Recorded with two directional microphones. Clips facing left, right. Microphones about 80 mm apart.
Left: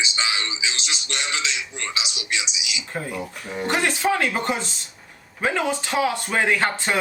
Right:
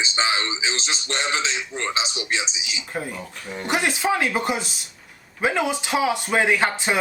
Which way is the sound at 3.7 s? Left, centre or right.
Centre.